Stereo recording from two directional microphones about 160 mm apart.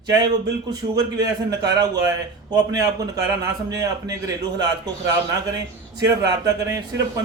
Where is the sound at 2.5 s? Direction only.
25° right (ahead or behind).